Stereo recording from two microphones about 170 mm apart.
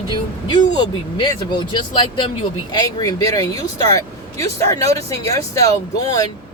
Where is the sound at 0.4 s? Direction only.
25° left (ahead or behind).